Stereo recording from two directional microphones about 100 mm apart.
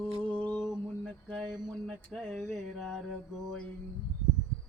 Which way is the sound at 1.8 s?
5° left (ahead or behind).